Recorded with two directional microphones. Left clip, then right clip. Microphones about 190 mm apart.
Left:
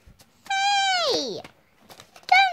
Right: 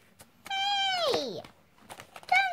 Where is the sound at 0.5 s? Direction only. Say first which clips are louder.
Left 7 dB; 35° left (ahead or behind).